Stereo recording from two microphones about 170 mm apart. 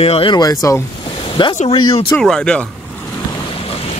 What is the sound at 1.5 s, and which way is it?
Speech, 35° left (ahead or behind).